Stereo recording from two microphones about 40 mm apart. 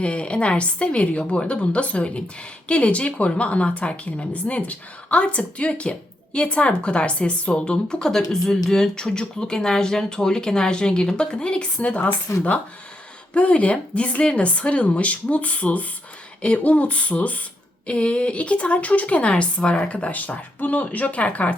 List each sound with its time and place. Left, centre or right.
0.0 s a woman's voice: left
8.1 s speech: centre; by 11.7 s left
11.8 s a woman's voice: left